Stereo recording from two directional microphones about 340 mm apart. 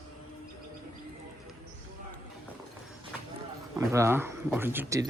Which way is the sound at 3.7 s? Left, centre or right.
Centre.